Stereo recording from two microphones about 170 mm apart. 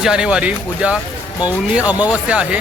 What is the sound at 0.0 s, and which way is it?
Speech, 5° right (ahead or behind).